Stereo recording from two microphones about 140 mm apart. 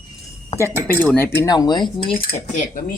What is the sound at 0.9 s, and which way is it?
Speech, 15° left (ahead or behind).